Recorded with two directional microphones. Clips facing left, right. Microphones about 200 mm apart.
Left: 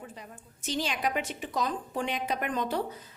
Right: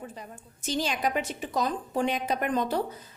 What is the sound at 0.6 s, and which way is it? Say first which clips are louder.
A woman's voice: right 2 dB; 40° right (ahead or behind).